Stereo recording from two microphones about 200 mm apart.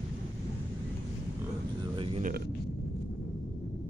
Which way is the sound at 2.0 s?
25° right (ahead or behind).